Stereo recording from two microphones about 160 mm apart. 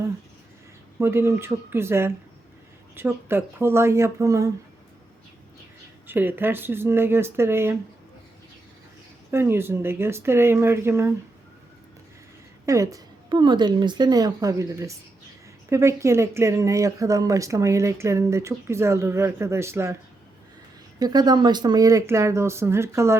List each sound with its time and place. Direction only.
0.9 s speech: 15° right (ahead or behind)
6.1 s speech: 10° right (ahead or behind)
9.3 s speech: 15° right (ahead or behind)
12.6 s speech: 20° right (ahead or behind)
21.0 s speech: 25° right (ahead or behind)